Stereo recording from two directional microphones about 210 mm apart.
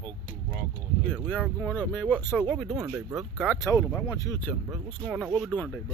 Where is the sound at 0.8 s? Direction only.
5° left (ahead or behind).